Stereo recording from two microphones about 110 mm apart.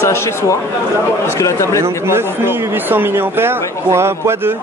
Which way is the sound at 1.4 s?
25° left (ahead or behind).